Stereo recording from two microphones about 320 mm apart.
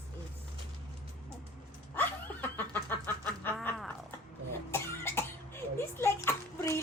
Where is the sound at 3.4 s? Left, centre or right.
Centre.